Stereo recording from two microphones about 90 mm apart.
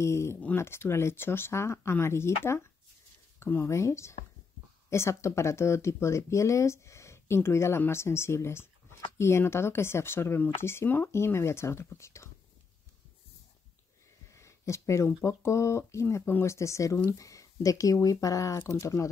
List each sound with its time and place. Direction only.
0.0 s speech: 30° left (ahead or behind)
14.3 s a sound: 35° left (ahead or behind)
15.2 s speech: 35° left (ahead or behind)